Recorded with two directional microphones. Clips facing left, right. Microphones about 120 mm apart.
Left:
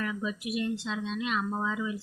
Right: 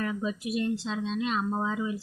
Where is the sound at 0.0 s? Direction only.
35° right (ahead or behind).